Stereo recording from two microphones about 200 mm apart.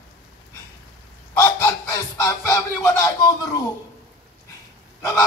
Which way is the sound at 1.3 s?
15° left (ahead or behind).